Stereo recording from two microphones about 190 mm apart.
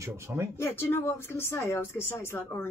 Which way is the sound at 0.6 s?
10° left (ahead or behind).